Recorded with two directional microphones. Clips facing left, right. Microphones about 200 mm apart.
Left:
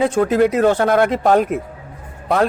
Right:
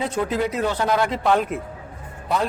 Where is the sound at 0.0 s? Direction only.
50° left (ahead or behind).